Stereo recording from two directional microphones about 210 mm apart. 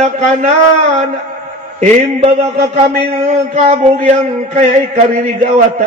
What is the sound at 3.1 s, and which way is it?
A man's voice, 30° right (ahead or behind).